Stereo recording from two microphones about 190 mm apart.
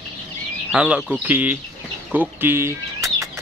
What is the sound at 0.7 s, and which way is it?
Speech, 5° right (ahead or behind).